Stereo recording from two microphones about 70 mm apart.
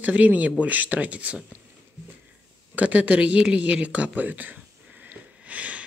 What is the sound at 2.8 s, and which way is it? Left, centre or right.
Speech, right.